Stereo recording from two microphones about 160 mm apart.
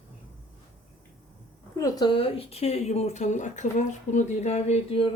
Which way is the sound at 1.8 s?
30° left (ahead or behind).